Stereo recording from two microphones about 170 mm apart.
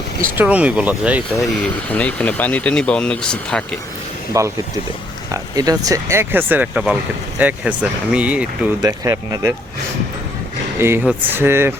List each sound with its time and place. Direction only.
0.3 s speech: 10° right (ahead or behind)
1.9 s speech: 10° left (ahead or behind)
4.4 s speech: 20° right (ahead or behind)
8.8 s speech: 20° right (ahead or behind)
10.8 s speech: 15° right (ahead or behind)